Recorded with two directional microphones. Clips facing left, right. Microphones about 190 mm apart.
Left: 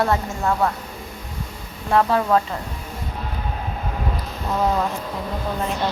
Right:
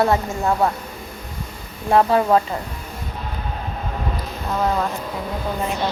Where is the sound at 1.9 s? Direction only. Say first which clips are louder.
Right 2 dB; 20° right (ahead or behind).